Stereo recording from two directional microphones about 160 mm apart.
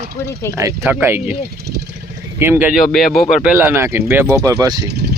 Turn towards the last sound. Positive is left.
turn(degrees=-90)